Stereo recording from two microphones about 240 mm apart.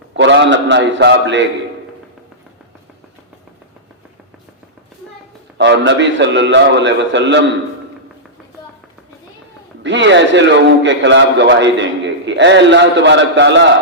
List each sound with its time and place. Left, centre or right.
0.2 s a man's voice: right
5.5 s a man's voice: right
9.8 s a man's voice: right